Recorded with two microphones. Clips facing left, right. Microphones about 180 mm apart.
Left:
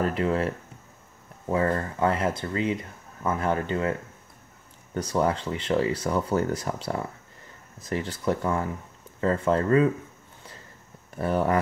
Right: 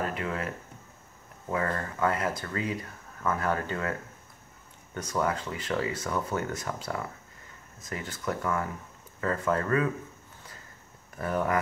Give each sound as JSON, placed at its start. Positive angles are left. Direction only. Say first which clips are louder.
{"t": 0.0, "sound": "speech", "louder": "left 7 dB", "side_deg": 35}
{"t": 1.5, "sound": "speech", "louder": "left 6 dB", "side_deg": 30}
{"t": 4.9, "sound": "speech", "louder": "left 5 dB", "side_deg": 30}
{"t": 11.1, "sound": "speech", "louder": "left 4 dB", "side_deg": 30}